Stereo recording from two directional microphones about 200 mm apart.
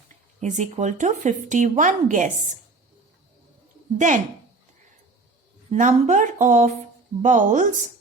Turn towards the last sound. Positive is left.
turn(degrees=-40)  # may be behind; listen again after turning